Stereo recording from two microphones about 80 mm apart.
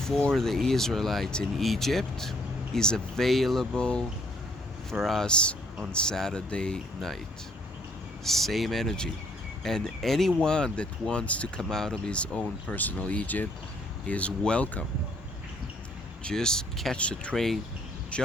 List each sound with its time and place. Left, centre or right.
0.2 s speech: centre
8.2 s speech: centre
16.2 s speech: centre